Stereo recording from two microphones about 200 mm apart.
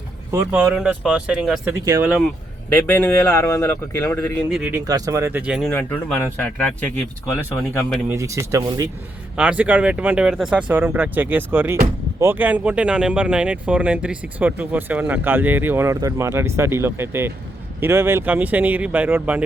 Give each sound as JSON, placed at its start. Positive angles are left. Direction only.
{"t": 0.3, "sound": "speech", "side_deg": -15}
{"t": 1.8, "sound": "speech", "side_deg": -15}
{"t": 2.6, "sound": "speech", "side_deg": 10}
{"t": 4.4, "sound": "speech", "side_deg": 0}
{"t": 4.7, "sound": "speech", "side_deg": -15}
{"t": 8.1, "sound": "speech", "side_deg": -15}